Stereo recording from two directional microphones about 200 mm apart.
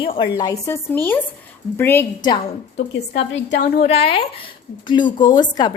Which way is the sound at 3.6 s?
35° left (ahead or behind).